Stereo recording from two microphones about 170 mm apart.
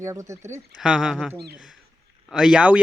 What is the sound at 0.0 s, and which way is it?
Speech, 15° right (ahead or behind).